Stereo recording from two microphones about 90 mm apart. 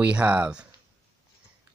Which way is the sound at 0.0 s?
15° right (ahead or behind).